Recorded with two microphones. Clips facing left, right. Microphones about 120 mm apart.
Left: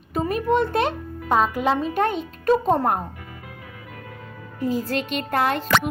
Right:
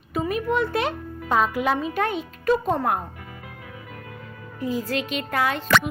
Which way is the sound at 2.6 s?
35° left (ahead or behind).